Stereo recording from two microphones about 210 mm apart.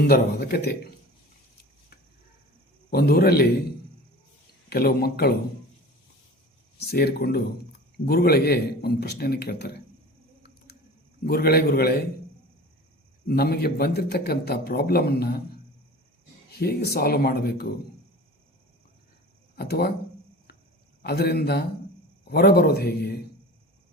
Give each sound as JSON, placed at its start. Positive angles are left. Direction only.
{"t": 0.1, "sound": "a man's voice", "side_deg": 50}
{"t": 2.9, "sound": "a man's voice", "side_deg": 45}
{"t": 4.7, "sound": "a man's voice", "side_deg": 45}
{"t": 6.8, "sound": "a man's voice", "side_deg": 50}
{"t": 11.2, "sound": "a man's voice", "side_deg": 45}
{"t": 13.2, "sound": "a man's voice", "side_deg": 45}
{"t": 16.5, "sound": "a man's voice", "side_deg": 50}
{"t": 19.5, "sound": "a man's voice", "side_deg": 50}
{"t": 21.0, "sound": "a man's voice", "side_deg": 50}